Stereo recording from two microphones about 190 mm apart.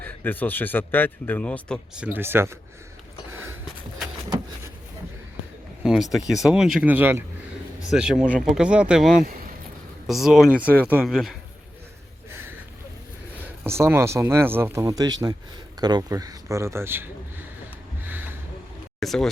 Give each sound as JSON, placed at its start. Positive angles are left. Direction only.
{"t": 0.0, "sound": "speech", "side_deg": 10}
{"t": 2.1, "sound": "speech", "side_deg": -10}
{"t": 5.8, "sound": "speech", "side_deg": 0}
{"t": 13.7, "sound": "speech", "side_deg": -15}
{"t": 18.0, "sound": "a sound", "side_deg": -10}
{"t": 18.9, "sound": "speech", "side_deg": 0}